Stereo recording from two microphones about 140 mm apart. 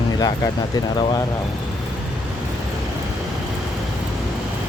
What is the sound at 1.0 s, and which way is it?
Speech, 30° left (ahead or behind).